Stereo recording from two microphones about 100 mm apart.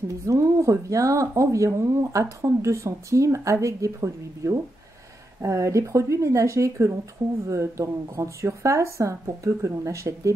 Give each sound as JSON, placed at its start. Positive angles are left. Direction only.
{"t": 0.3, "sound": "speech", "side_deg": -30}